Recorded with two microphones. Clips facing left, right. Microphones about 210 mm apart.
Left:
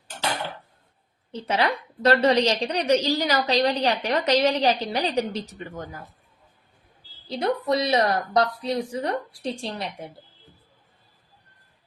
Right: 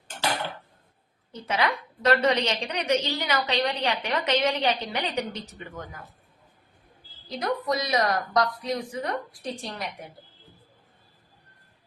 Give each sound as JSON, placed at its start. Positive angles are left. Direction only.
{"t": 1.3, "sound": "a woman's voice", "side_deg": 30}
{"t": 7.3, "sound": "a woman's voice", "side_deg": 30}